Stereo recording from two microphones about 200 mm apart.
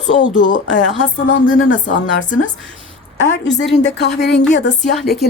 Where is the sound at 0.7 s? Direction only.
65° left (ahead or behind).